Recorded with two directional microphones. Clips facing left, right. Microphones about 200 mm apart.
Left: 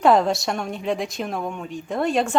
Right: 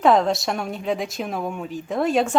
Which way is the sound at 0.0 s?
Centre (ahead or behind).